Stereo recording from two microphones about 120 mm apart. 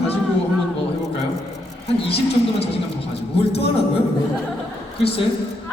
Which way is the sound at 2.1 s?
55° left (ahead or behind).